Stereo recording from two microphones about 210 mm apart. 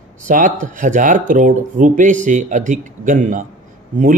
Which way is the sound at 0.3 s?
40° right (ahead or behind).